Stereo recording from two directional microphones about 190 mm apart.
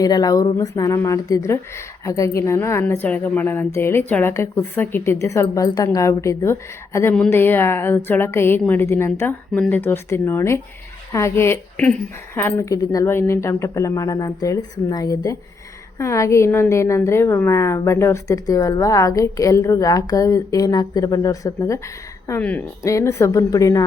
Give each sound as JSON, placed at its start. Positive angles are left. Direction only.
{"t": 0.0, "sound": "speech", "side_deg": 20}